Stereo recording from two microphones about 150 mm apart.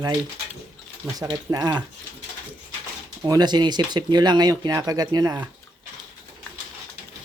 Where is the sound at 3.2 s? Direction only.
25° right (ahead or behind).